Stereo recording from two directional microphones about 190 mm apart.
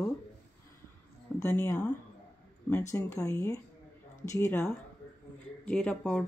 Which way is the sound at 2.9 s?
15° left (ahead or behind).